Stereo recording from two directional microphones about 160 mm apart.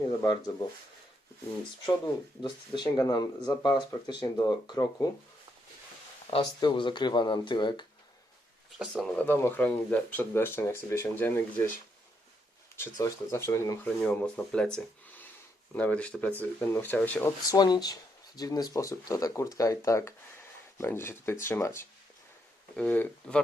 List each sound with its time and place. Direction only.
0.2 s speech: 25° left (ahead or behind)
2.4 s speech: 30° left (ahead or behind)
6.3 s speech: 30° left (ahead or behind)
8.8 s speech: centre (ahead or behind)
9.1 s speech: 15° left (ahead or behind)
12.7 s speech: 15° left (ahead or behind)
14.0 s speech: 5° left (ahead or behind)
17.5 s speech: 25° left (ahead or behind); by 23.4 s 10° left (ahead or behind)